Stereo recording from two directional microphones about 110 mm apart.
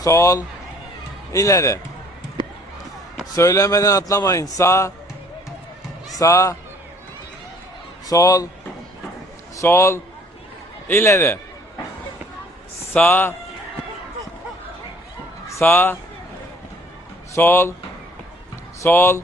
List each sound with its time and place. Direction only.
0.0 s a man's voice: 30° left (ahead or behind)
3.3 s a man's voice: 30° left (ahead or behind)
6.1 s a man's voice: 30° left (ahead or behind)
8.0 s speech: 30° left (ahead or behind)
9.6 s a man's voice: 25° left (ahead or behind)
12.9 s a man's voice: 15° left (ahead or behind)
15.4 s speech: 25° left (ahead or behind)
17.3 s a man's voice: 25° left (ahead or behind)
18.8 s speech: 25° left (ahead or behind)